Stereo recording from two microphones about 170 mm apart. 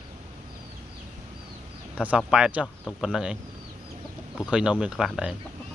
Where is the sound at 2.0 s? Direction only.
5° right (ahead or behind).